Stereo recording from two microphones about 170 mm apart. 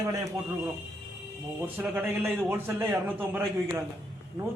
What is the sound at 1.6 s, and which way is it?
A man's voice, 10° right (ahead or behind).